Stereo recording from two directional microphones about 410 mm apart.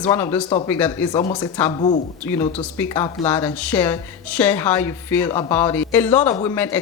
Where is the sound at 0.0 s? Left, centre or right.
Centre.